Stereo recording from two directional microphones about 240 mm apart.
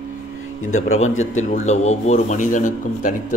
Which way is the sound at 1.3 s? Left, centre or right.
Left.